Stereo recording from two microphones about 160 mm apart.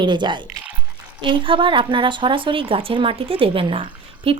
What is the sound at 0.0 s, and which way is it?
Speech, 30° right (ahead or behind).